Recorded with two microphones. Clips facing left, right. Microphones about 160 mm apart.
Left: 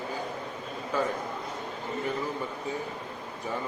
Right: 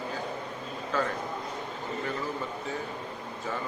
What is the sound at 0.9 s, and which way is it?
Speech, 10° left (ahead or behind).